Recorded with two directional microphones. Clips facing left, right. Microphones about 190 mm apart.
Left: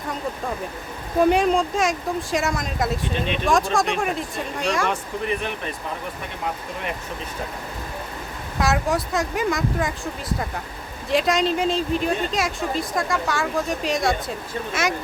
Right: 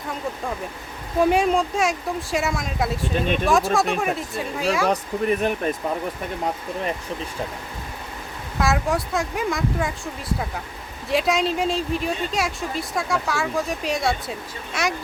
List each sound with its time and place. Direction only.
1.2 s speech: centre (ahead or behind)
4.9 s speech: 45° right (ahead or behind)
8.5 s speech: centre (ahead or behind)